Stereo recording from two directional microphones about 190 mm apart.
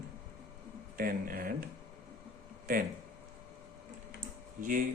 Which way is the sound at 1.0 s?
50° right (ahead or behind).